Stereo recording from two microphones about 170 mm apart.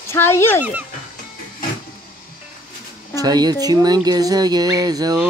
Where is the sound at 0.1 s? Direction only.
15° left (ahead or behind).